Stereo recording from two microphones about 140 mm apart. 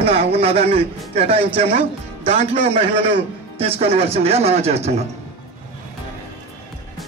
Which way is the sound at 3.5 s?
45° right (ahead or behind).